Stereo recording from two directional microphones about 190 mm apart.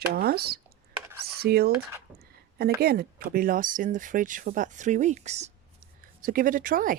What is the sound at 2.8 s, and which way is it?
Speech, 55° right (ahead or behind).